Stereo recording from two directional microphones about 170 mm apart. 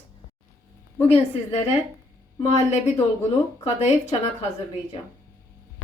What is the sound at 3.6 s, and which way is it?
Speech, 40° left (ahead or behind).